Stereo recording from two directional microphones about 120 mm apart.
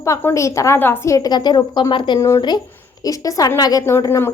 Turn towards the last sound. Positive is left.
turn(degrees=25)  # may be behind; listen again after turning